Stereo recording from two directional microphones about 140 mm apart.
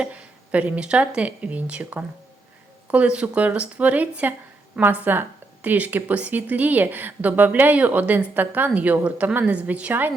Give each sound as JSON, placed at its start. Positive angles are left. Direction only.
{"t": 0.0, "sound": "a woman's voice", "side_deg": -10}